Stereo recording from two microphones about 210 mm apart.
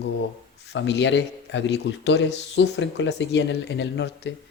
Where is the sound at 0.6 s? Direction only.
55° left (ahead or behind).